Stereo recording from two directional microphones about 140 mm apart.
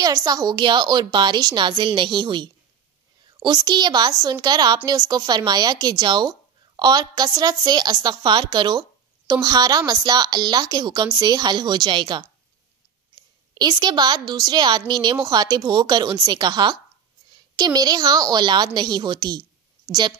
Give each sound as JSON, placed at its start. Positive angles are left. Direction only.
{"t": 0.0, "sound": "a woman's voice", "side_deg": -30}
{"t": 13.6, "sound": "a woman's voice", "side_deg": -30}